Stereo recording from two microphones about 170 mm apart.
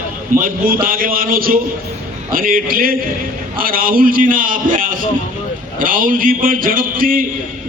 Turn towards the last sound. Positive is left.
turn(degrees=-55)  # may be behind; listen again after turning